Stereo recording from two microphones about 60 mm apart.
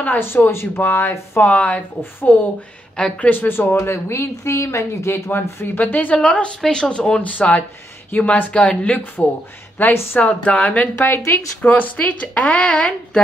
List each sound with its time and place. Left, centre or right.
0.0 s speech: left
1.5 s speech: left
2.0 s speech: left
3.7 s speech: left; by 9.0 s centre
9.8 s speech: left
10.1 s speech: left
11.0 s speech: left; by 13.2 s centre